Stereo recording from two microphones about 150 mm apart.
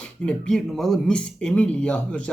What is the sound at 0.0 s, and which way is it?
Speech, 5° left (ahead or behind).